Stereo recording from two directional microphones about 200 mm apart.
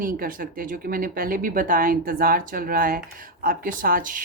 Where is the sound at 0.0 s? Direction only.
45° right (ahead or behind).